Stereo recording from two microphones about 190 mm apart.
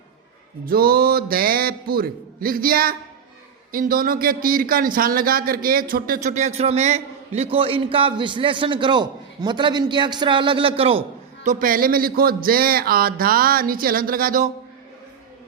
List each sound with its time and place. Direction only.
0.6 s speech: 50° right (ahead or behind); by 11.0 s 30° right (ahead or behind)
11.4 s speech: 50° right (ahead or behind)